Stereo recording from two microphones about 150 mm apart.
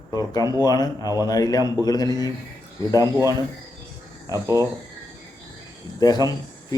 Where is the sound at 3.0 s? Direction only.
20° right (ahead or behind).